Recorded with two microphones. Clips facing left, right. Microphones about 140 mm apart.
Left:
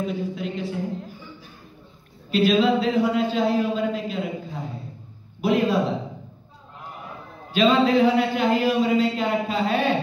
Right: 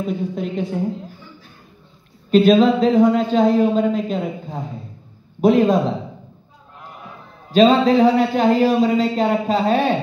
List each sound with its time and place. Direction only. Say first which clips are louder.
0.3 s a sound: right 5 dB; 45° right (ahead or behind)
2.3 s a man's voice: right 6 dB; 40° right (ahead or behind)
7.5 s a man's voice: right 5 dB; 40° right (ahead or behind)